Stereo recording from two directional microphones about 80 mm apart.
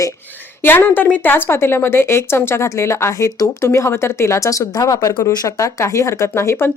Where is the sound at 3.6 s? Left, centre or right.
Left.